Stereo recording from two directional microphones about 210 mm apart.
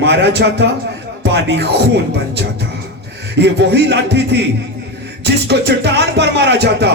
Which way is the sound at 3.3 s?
55° right (ahead or behind).